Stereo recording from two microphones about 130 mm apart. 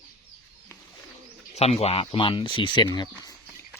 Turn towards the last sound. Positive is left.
turn(degrees=30)  # may be behind; listen again after turning